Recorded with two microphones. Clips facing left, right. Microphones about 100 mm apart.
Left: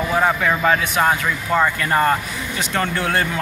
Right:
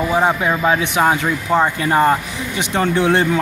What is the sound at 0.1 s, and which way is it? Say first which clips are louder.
Speech: even; 15° right (ahead or behind).